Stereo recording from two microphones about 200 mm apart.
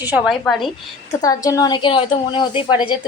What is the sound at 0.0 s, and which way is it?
Speech, 10° right (ahead or behind).